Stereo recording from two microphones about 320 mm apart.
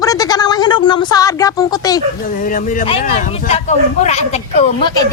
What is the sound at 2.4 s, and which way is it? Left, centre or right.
Speech, left.